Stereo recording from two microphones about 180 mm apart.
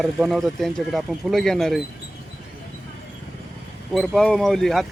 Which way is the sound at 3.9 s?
Centre (ahead or behind).